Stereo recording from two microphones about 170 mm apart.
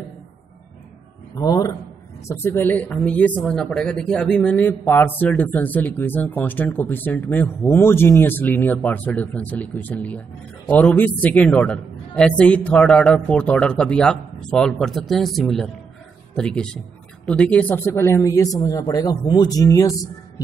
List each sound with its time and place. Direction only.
1.3 s a man's voice: 20° left (ahead or behind)